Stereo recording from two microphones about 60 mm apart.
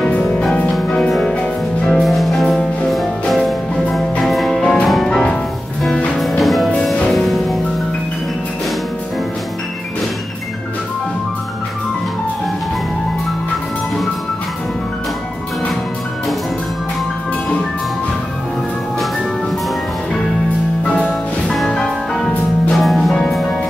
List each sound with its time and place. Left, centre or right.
0.7 s music: centre
5.1 s music: centre
20.8 s music: centre